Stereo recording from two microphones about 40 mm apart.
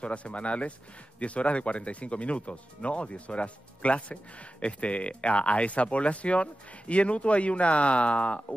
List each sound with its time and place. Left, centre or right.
0.0 s speech: left